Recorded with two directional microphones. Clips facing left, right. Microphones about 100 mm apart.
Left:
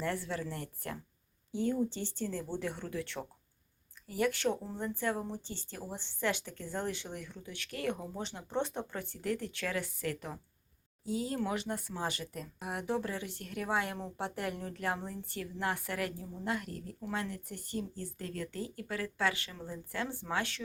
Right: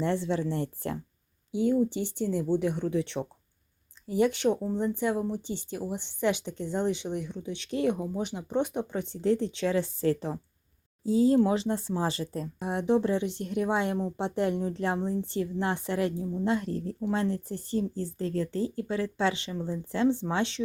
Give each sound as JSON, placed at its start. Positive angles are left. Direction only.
{"t": 0.0, "sound": "speech", "side_deg": -25}
{"t": 1.5, "sound": "speech", "side_deg": -15}